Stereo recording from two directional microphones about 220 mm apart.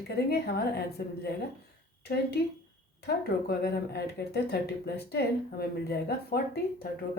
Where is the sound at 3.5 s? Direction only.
45° left (ahead or behind).